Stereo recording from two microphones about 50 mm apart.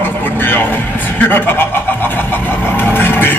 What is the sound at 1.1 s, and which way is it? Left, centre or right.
Speech, left.